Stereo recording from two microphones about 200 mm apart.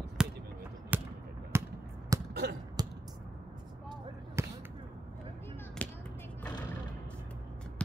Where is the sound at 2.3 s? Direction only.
55° right (ahead or behind).